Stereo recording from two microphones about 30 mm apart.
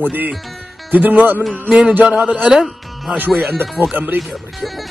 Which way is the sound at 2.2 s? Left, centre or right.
Right.